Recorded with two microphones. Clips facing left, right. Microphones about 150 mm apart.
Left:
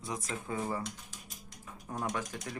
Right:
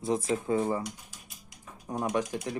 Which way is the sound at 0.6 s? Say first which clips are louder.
Right 5 dB; 10° right (ahead or behind).